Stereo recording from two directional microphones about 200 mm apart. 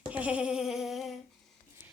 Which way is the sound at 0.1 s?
5° right (ahead or behind).